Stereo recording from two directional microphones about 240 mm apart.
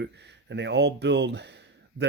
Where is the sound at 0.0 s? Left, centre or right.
Right.